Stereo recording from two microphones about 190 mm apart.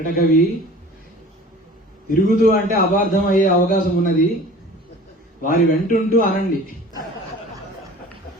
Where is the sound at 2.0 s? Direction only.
50° left (ahead or behind).